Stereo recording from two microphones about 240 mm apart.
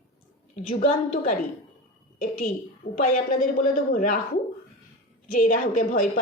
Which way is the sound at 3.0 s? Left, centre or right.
Left.